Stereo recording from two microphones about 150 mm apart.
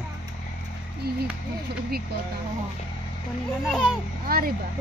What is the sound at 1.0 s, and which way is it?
Speech, 90° right.